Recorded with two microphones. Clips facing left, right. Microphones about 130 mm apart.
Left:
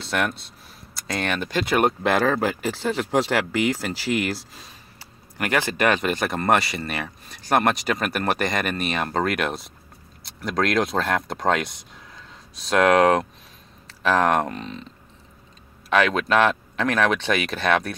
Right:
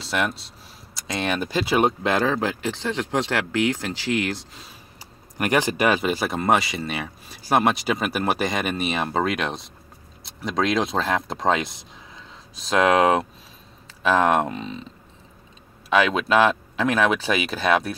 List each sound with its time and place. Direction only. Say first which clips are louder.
0.0 s speech: even; centre (ahead or behind)
5.4 s speech: right 1 dB; 15° right (ahead or behind)
15.9 s speech: even; centre (ahead or behind)